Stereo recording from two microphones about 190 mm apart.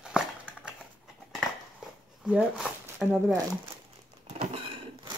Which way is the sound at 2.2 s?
5° right (ahead or behind).